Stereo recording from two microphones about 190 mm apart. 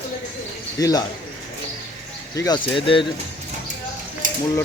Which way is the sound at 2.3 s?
20° left (ahead or behind).